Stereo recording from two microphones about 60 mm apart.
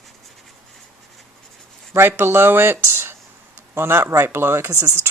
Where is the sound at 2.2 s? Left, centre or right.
Right.